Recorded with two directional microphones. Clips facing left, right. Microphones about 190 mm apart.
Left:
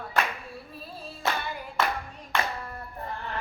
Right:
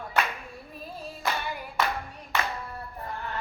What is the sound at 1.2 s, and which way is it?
Clapping, 25° left (ahead or behind).